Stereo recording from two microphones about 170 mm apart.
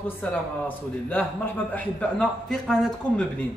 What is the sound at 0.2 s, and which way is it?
A man's voice, 10° left (ahead or behind).